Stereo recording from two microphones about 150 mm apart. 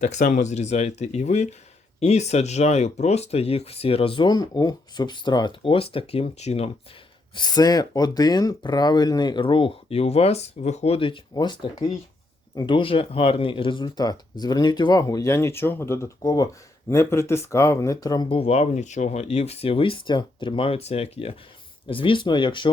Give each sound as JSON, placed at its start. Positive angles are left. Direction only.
{"t": 0.0, "sound": "speech", "side_deg": 55}
{"t": 7.3, "sound": "speech", "side_deg": 25}